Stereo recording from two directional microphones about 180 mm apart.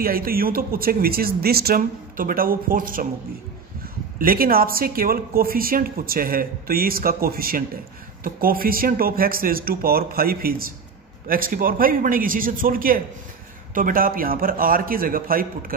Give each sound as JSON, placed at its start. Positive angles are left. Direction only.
{"t": 0.0, "sound": "speech", "side_deg": -55}
{"t": 4.2, "sound": "a man's voice", "side_deg": -55}